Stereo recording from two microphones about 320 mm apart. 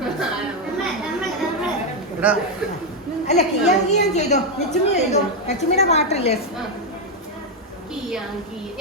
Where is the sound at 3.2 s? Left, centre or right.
Left.